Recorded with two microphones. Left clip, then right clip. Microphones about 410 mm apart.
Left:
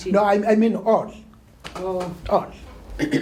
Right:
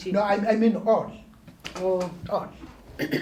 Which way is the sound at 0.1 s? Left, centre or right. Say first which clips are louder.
Left 5 dB; left.